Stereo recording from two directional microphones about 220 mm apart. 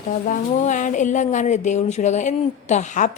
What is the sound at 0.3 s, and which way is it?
A woman's voice, 35° left (ahead or behind).